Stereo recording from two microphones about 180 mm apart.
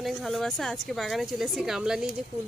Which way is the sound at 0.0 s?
Centre (ahead or behind).